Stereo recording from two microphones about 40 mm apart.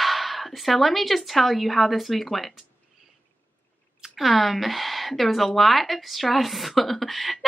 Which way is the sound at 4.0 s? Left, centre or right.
Centre.